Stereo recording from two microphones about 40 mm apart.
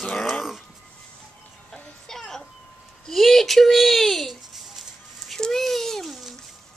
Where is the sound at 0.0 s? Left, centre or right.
Centre.